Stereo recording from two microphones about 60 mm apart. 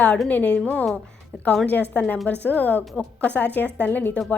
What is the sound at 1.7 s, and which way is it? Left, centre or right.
A woman's voice, left.